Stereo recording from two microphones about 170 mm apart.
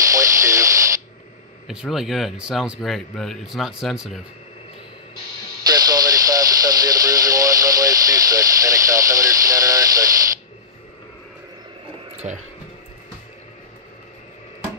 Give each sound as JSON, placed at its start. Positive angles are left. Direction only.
{"t": 0.0, "sound": "radio", "side_deg": -20}
{"t": 1.7, "sound": "speech", "side_deg": -5}
{"t": 5.7, "sound": "radio", "side_deg": -20}
{"t": 12.2, "sound": "speech", "side_deg": -40}